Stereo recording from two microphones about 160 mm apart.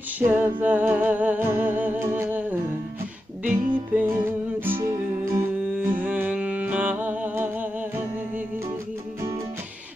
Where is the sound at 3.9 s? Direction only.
15° right (ahead or behind).